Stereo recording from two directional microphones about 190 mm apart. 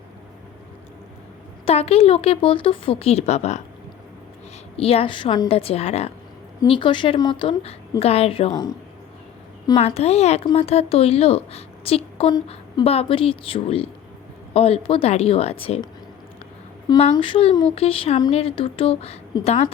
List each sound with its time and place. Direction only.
1.6 s a woman's voice: 30° left (ahead or behind)
4.8 s a woman's voice: 30° left (ahead or behind)
9.6 s a woman's voice: 30° left (ahead or behind)
17.0 s a woman's voice: 30° left (ahead or behind)